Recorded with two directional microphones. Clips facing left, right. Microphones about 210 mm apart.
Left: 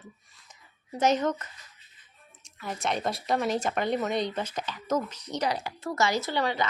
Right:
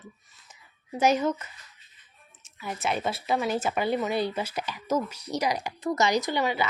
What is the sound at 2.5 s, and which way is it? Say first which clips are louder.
Speech: right 1 dB; 5° right (ahead or behind).